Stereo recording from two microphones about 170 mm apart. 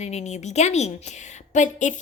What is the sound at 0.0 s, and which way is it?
A woman's voice, 40° left (ahead or behind).